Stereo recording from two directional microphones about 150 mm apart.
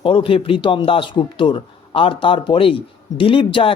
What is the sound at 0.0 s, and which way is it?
Speech, 35° left (ahead or behind).